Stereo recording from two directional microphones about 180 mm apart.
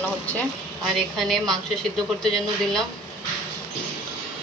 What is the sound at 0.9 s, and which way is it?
A woman's voice, centre (ahead or behind).